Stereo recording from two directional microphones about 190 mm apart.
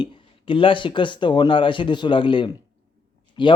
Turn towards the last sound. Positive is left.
turn(degrees=25)  # may be behind; listen again after turning